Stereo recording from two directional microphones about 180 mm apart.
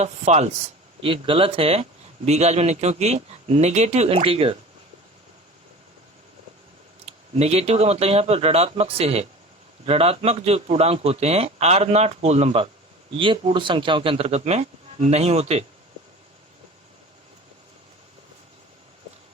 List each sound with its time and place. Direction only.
0.0 s speech: 35° right (ahead or behind)
7.0 s speech: 35° right (ahead or behind)